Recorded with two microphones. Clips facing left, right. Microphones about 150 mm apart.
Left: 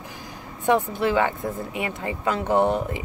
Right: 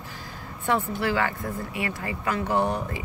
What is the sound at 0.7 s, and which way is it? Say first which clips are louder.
Speech: left 4 dB; 20° left (ahead or behind).